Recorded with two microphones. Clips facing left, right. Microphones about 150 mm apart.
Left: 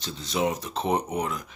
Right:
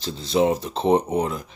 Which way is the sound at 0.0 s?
30° right (ahead or behind).